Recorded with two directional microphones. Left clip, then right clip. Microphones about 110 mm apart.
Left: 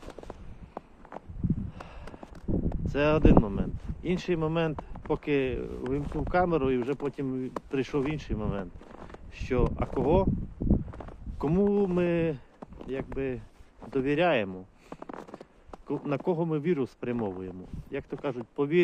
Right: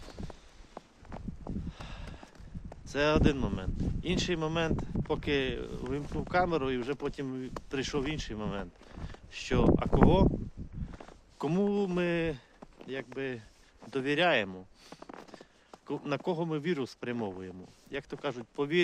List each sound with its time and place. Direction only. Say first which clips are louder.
2.8 s speech: left 3 dB; 25° right (ahead or behind)
6.3 s speech: left 3 dB; 20° right (ahead or behind)
11.3 s speech: left 4 dB; 35° right (ahead or behind)
15.9 s speech: left 3 dB; 30° right (ahead or behind)